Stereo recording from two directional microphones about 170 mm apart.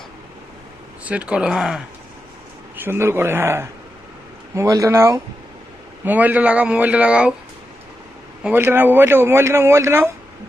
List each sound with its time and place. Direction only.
1.0 s speech: 5° right (ahead or behind)
2.8 s speech: 15° right (ahead or behind)
8.4 s speech: 10° right (ahead or behind)